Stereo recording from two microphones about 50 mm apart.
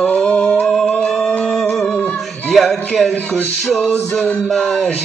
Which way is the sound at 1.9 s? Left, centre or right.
Left.